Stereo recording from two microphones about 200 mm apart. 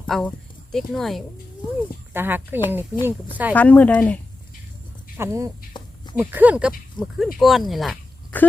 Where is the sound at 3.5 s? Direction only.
5° left (ahead or behind).